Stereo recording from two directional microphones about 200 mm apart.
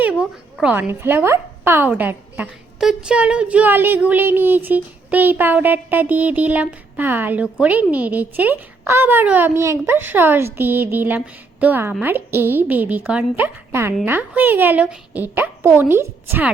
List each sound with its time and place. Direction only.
0.0 s speech: 5° right (ahead or behind)